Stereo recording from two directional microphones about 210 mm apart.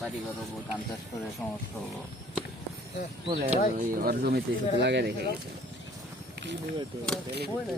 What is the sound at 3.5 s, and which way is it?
Speech, 40° right (ahead or behind).